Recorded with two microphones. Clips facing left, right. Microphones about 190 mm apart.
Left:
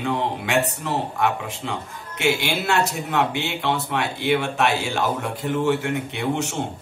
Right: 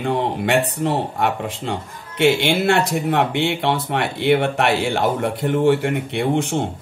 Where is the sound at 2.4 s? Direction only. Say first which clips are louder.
Right 5 dB; 60° right (ahead or behind).